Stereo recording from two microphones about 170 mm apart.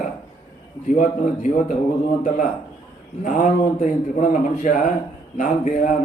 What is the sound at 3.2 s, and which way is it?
A man's voice, 50° left (ahead or behind).